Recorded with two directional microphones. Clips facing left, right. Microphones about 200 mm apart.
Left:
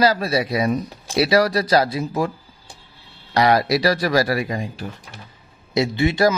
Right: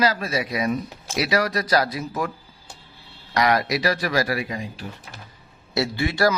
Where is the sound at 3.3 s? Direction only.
30° left (ahead or behind).